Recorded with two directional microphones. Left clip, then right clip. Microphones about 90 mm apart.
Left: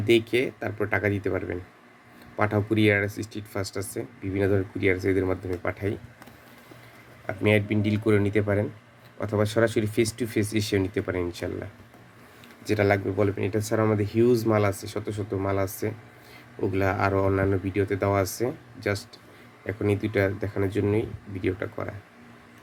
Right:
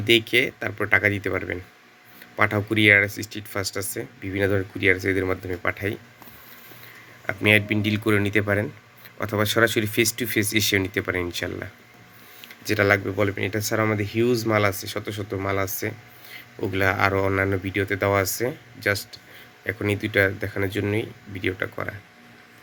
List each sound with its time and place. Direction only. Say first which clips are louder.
0.0 s speech: right 3 dB; 10° left (ahead or behind)
5.2 s speech: right 3 dB; centre (ahead or behind)
7.3 s speech: right 4 dB; centre (ahead or behind)
12.6 s speech: right 3 dB; 10° left (ahead or behind)
14.0 s speech: left 1 dB; 25° left (ahead or behind)
14.4 s speech: right 2 dB; 5° left (ahead or behind)
15.9 s a sound: right 2 dB; centre (ahead or behind)
17.2 s speech: right 2 dB; centre (ahead or behind)